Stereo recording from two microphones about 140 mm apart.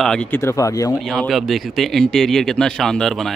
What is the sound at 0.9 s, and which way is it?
Speech, centre (ahead or behind).